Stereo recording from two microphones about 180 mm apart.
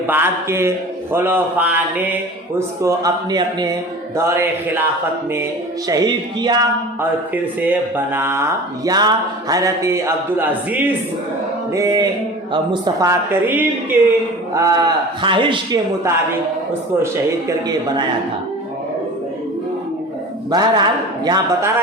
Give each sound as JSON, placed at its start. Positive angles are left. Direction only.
{"t": 0.1, "sound": "a man's voice", "side_deg": -15}
{"t": 4.4, "sound": "speech", "side_deg": -10}
{"t": 5.9, "sound": "a man's voice", "side_deg": -20}
{"t": 7.3, "sound": "a man's voice", "side_deg": -10}
{"t": 20.5, "sound": "a man's voice", "side_deg": -20}